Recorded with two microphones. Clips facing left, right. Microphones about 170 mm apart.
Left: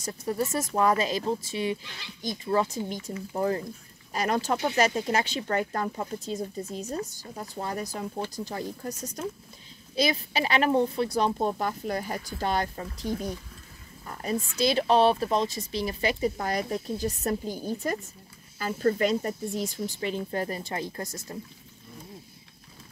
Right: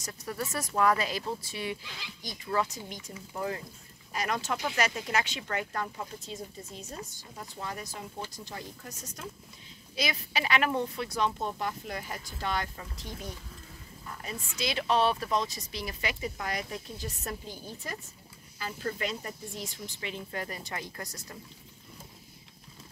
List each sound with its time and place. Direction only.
0.0 s speech: 25° left (ahead or behind)